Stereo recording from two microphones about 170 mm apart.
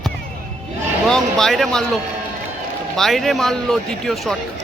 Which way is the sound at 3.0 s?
Centre (ahead or behind).